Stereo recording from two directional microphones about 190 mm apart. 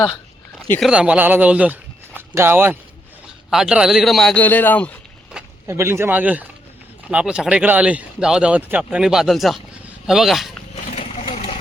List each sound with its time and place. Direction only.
0.8 s speech: 5° right (ahead or behind)
5.6 s speech: 15° right (ahead or behind)
10.9 s vehicle: 35° left (ahead or behind)